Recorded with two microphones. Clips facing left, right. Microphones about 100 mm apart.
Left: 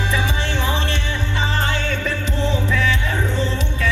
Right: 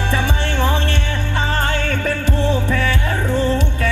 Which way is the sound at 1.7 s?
55° right (ahead or behind).